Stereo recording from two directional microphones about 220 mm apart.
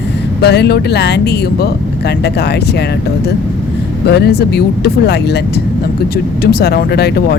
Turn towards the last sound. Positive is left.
turn(degrees=45)  # may be behind; listen again after turning